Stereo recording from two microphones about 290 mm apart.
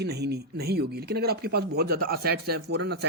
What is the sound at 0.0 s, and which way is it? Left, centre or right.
Speech, right.